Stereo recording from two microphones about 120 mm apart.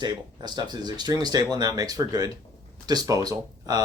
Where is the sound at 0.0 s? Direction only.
35° right (ahead or behind).